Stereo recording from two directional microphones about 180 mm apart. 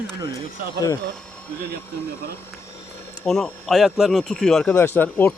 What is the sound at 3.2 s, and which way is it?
Speech, centre (ahead or behind).